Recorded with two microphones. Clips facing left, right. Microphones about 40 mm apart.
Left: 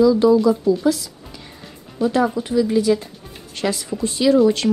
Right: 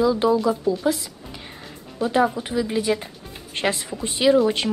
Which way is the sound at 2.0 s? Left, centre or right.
Centre.